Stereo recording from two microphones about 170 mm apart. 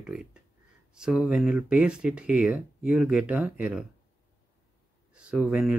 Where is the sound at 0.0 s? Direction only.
5° right (ahead or behind).